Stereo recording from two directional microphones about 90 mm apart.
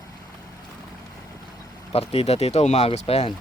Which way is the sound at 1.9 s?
90° left.